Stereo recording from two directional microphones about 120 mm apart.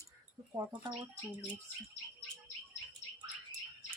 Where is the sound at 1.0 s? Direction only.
10° right (ahead or behind).